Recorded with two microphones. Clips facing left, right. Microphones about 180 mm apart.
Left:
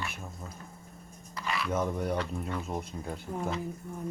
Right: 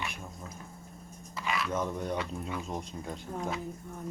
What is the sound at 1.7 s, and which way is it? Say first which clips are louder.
Speech: left 5 dB; 10° left (ahead or behind).